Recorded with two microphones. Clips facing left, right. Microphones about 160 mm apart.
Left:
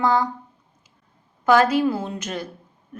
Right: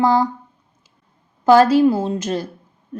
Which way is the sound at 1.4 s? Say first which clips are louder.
Right 5 dB; 35° right (ahead or behind).